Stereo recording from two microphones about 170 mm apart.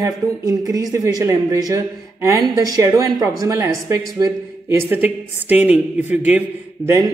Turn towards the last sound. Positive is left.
turn(degrees=-15)  # may be behind; listen again after turning